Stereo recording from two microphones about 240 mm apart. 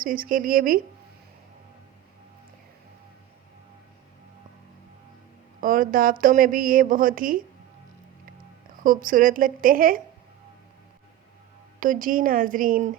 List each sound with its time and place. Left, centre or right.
0.0 s a woman's voice: right
5.5 s a woman's voice: right
8.8 s a woman's voice: right
11.8 s a woman's voice: right